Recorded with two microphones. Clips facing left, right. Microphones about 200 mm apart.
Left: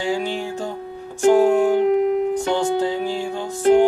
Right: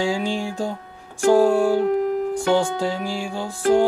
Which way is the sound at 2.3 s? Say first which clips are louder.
Even; 10° right (ahead or behind).